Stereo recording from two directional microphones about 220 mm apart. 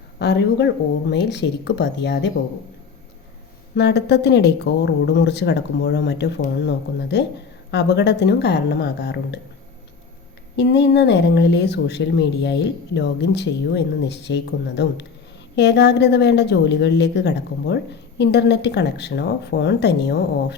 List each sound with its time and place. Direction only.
0.2 s speech: 50° left (ahead or behind)
3.8 s speech: 50° left (ahead or behind)
10.6 s speech: 50° left (ahead or behind)